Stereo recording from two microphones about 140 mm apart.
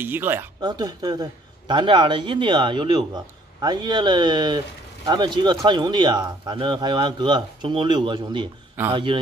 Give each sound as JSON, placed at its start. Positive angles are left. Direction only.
{"t": 0.0, "sound": "speech", "side_deg": -15}
{"t": 0.6, "sound": "speech", "side_deg": -30}